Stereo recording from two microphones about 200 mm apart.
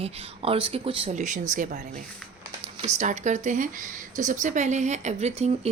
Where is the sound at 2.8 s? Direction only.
35° right (ahead or behind).